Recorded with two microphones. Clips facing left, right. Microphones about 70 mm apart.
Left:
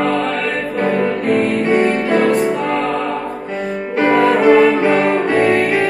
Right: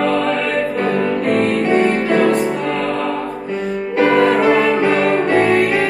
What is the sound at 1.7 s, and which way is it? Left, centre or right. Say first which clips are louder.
Music: even; left.